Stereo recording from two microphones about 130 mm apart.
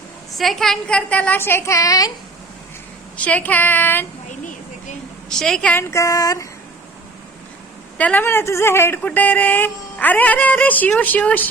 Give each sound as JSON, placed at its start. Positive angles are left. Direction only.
{"t": 0.3, "sound": "speech", "side_deg": 0}
{"t": 3.2, "sound": "speech", "side_deg": 10}
{"t": 4.3, "sound": "a sound", "side_deg": 70}
{"t": 5.4, "sound": "a woman's voice", "side_deg": 5}
{"t": 5.7, "sound": "female singing", "side_deg": 25}
{"t": 7.9, "sound": "speech", "side_deg": 10}